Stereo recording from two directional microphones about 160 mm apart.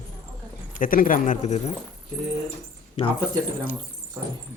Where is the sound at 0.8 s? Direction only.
60° left (ahead or behind).